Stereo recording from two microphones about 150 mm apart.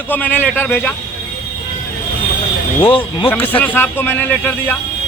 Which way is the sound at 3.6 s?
10° left (ahead or behind).